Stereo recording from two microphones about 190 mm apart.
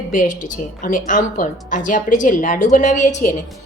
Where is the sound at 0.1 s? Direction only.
45° left (ahead or behind).